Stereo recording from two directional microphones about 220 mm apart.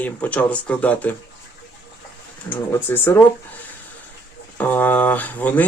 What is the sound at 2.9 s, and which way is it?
Speech, 10° left (ahead or behind).